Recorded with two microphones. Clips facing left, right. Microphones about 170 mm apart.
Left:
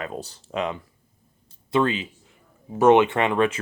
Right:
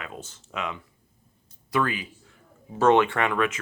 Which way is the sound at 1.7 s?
25° left (ahead or behind).